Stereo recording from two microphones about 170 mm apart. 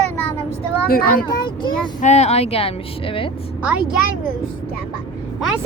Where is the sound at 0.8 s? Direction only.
60° left (ahead or behind).